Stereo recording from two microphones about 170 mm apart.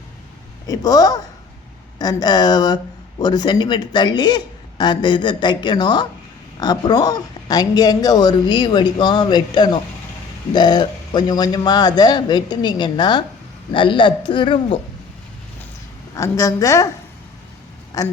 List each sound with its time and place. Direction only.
0.7 s speech: 20° left (ahead or behind)
16.1 s speech: 20° left (ahead or behind)
18.0 s speech: 20° left (ahead or behind)